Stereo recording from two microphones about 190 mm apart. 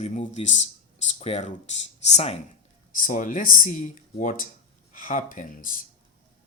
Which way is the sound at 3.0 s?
45° left (ahead or behind).